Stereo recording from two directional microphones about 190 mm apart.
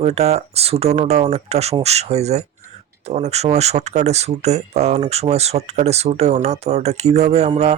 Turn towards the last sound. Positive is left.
turn(degrees=-35)  # may be behind; listen again after turning